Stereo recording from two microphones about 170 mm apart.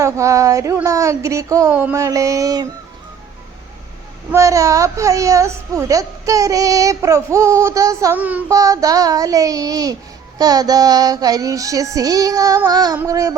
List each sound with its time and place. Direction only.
0.0 s a child's voice: 20° right (ahead or behind)
4.3 s a child's voice: 20° right (ahead or behind)
8.4 s a child's voice: 20° right (ahead or behind)